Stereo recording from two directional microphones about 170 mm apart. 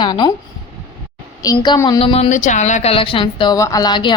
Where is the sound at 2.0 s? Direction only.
35° left (ahead or behind).